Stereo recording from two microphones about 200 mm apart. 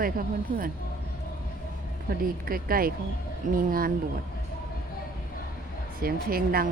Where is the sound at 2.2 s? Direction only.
45° right (ahead or behind).